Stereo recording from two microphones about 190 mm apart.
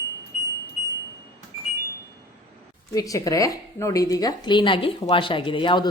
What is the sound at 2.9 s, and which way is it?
Speech, 20° left (ahead or behind).